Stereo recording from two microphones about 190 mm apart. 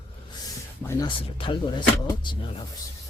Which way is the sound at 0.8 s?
20° left (ahead or behind).